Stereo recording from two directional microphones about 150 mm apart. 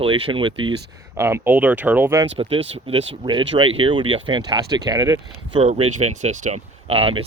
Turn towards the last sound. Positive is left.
turn(degrees=-40)  # may be behind; listen again after turning